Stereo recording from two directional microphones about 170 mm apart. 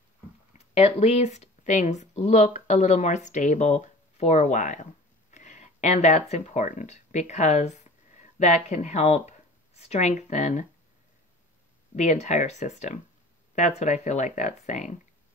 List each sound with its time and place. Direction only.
0.5 s speech: 40° left (ahead or behind)
11.9 s speech: 40° left (ahead or behind)